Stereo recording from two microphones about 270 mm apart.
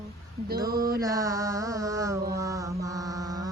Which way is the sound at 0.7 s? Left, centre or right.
Right.